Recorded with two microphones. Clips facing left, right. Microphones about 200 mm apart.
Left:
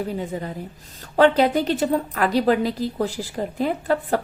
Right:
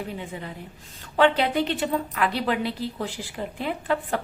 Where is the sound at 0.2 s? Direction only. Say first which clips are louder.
Left 7 dB; 40° left (ahead or behind).